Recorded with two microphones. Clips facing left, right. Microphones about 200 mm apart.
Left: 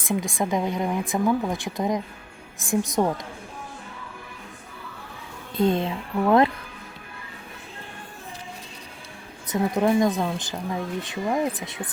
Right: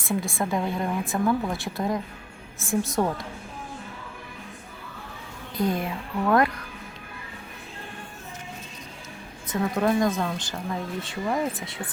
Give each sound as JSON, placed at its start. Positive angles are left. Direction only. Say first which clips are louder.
{"t": 0.0, "sound": "speech", "louder": "left 2 dB", "side_deg": 15}
{"t": 5.5, "sound": "a woman's voice", "louder": "left 4 dB", "side_deg": 25}
{"t": 9.5, "sound": "speech", "louder": "left 2 dB", "side_deg": 15}